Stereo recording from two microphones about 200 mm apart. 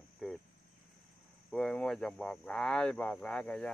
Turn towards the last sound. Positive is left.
turn(degrees=5)  # may be behind; listen again after turning